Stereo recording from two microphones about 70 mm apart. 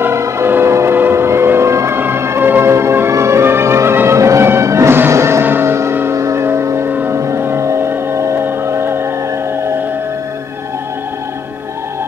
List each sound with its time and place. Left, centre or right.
0.0 s vehicle: right
2.0 s music: right
7.1 s a sound: right
9.6 s music: right